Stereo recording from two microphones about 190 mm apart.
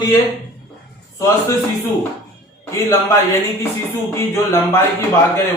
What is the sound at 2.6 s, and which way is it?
A man's voice, 15° left (ahead or behind).